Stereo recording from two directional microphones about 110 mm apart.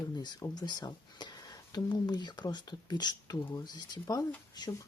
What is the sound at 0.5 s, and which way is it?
Speech, 40° left (ahead or behind).